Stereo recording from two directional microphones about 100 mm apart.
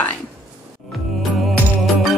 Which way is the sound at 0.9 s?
Centre (ahead or behind).